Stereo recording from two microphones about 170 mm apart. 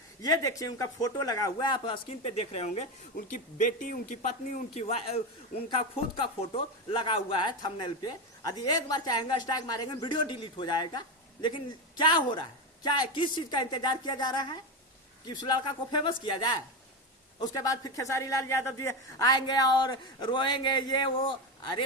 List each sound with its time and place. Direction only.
0.2 s speech: 20° left (ahead or behind); by 2.8 s 40° left (ahead or behind)
3.2 s speech: 55° left (ahead or behind); by 5.2 s 35° left (ahead or behind)
6.9 s speech: 30° left (ahead or behind)